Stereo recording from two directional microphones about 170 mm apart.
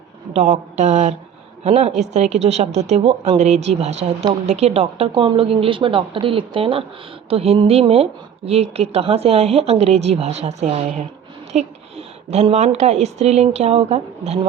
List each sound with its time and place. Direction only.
0.3 s a woman's voice: 45° right (ahead or behind)